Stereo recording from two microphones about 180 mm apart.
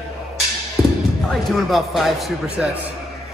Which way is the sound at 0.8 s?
Centre (ahead or behind).